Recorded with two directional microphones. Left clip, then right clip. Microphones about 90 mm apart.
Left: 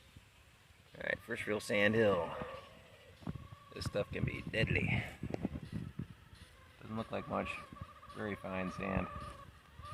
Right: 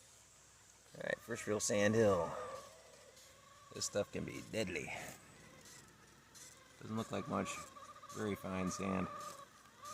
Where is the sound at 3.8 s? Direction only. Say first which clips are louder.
Left 1 dB; 30° right (ahead or behind).